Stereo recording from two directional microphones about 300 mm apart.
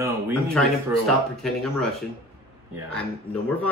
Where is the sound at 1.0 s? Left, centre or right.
Centre.